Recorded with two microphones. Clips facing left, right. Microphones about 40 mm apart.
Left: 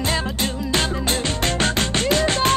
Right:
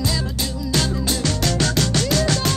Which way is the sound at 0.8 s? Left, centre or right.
Left.